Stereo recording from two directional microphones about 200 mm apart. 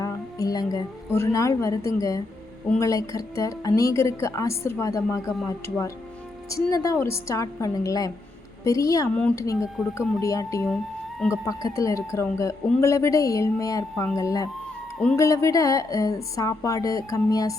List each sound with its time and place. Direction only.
0.0 s a woman's voice: 15° left (ahead or behind)
9.1 s speech: 5° left (ahead or behind)
10.2 s a woman's voice: 15° left (ahead or behind)